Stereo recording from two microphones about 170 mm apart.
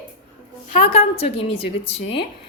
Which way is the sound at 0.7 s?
35° left (ahead or behind).